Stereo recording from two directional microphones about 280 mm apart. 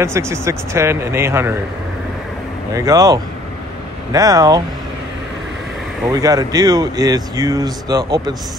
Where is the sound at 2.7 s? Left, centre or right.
Centre.